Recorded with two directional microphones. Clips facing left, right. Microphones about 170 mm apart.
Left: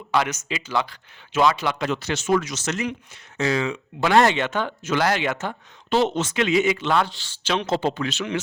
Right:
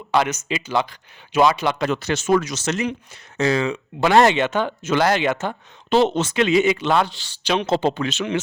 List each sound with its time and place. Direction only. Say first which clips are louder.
0.1 s speech: right 3 dB; 20° right (ahead or behind)
1.8 s speech: right 3 dB; 50° right (ahead or behind); by 3.8 s 35° right (ahead or behind)
4.0 s speech: right 3 dB; 25° right (ahead or behind)
6.7 s speech: right 2 dB; 15° right (ahead or behind)